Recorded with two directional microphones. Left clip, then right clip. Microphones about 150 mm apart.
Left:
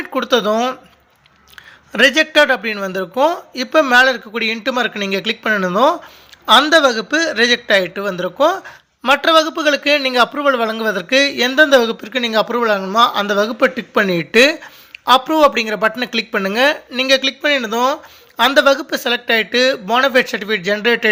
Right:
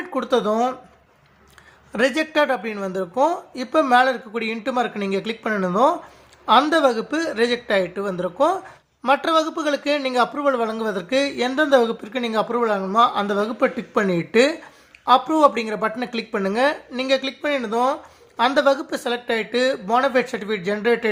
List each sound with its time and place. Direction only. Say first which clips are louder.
0.0 s speech: left 5 dB; 15° left (ahead or behind)
1.9 s a man's voice: left 8 dB; 15° left (ahead or behind)